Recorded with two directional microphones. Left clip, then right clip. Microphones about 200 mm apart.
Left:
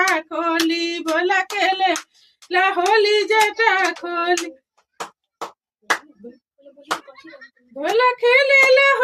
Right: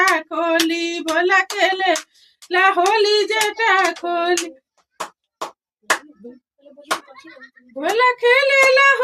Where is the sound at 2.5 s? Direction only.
Centre (ahead or behind).